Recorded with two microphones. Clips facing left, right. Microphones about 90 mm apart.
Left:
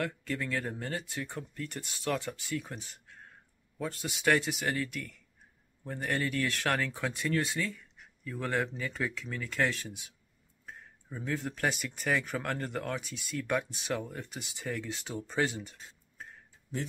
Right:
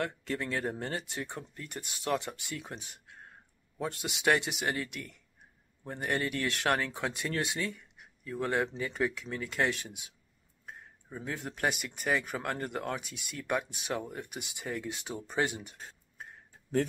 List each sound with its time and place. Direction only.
0.3 s speech: 25° right (ahead or behind)
7.7 s a sound: 35° right (ahead or behind)
8.4 s speech: 20° right (ahead or behind)
11.1 s speech: 15° right (ahead or behind)